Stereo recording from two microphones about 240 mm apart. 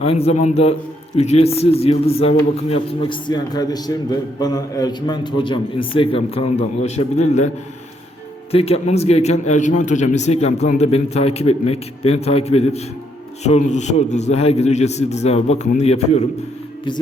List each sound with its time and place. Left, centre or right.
0.0 s a man's voice: left
8.5 s a man's voice: left